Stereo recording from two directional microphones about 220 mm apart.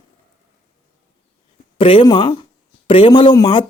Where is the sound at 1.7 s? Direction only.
25° left (ahead or behind).